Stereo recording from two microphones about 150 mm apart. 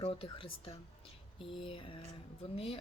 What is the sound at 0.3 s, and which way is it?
Speech, 35° left (ahead or behind).